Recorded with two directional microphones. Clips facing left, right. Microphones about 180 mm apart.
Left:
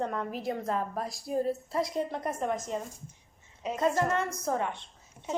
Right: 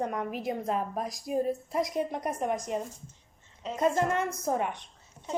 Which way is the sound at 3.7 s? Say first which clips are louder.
Right 1 dB; 15° right (ahead or behind).